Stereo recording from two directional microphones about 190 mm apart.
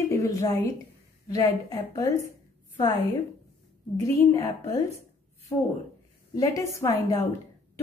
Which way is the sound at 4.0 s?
15° left (ahead or behind).